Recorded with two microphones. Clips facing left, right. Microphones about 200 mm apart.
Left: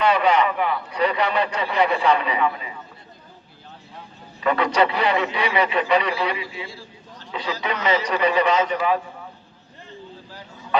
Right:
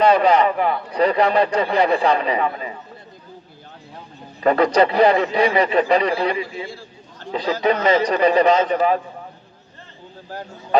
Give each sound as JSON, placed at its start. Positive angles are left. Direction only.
{"t": 0.0, "sound": "a man's voice", "side_deg": -35}
{"t": 4.4, "sound": "a man's voice", "side_deg": -40}
{"t": 10.2, "sound": "a sound", "side_deg": -50}